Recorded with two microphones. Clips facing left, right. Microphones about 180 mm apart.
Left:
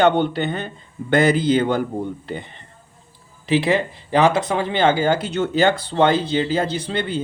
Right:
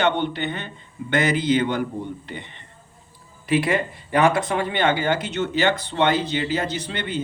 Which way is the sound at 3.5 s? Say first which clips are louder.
Left 3 dB; 25° left (ahead or behind).